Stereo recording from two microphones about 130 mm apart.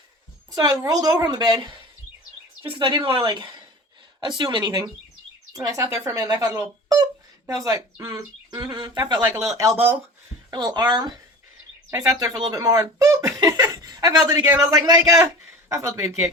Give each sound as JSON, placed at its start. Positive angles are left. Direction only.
{"t": 0.5, "sound": "a woman's voice", "side_deg": -25}
{"t": 9.2, "sound": "speech", "side_deg": -20}
{"t": 10.5, "sound": "a woman's voice", "side_deg": -30}